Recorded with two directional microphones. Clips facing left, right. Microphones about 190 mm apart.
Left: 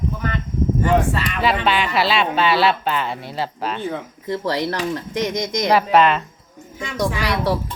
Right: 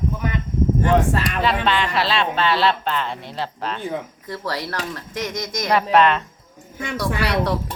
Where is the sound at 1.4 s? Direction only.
10° left (ahead or behind).